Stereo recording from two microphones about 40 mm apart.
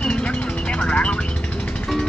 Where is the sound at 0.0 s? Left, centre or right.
Left.